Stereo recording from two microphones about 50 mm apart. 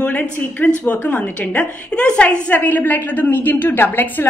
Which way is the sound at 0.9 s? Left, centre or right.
Left.